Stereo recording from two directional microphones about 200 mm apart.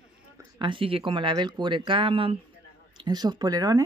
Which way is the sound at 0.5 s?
25° right (ahead or behind).